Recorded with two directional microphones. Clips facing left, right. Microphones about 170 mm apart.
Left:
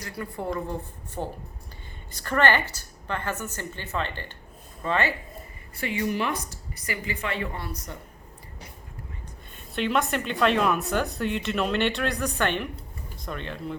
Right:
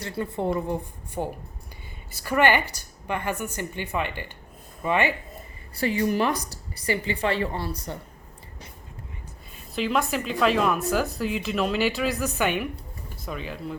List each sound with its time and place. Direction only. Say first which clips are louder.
0.0 s a woman's voice: right 5 dB; 25° right (ahead or behind)
5.7 s a woman's voice: right 4 dB; 35° right (ahead or behind)
9.6 s a woman's voice: even; centre (ahead or behind)